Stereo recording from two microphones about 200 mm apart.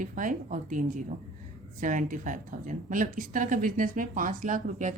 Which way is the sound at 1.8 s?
40° right (ahead or behind).